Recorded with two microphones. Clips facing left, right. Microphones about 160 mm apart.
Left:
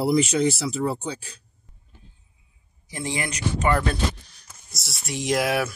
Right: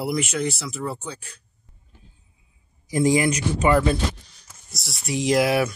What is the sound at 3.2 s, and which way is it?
Speech, 5° right (ahead or behind).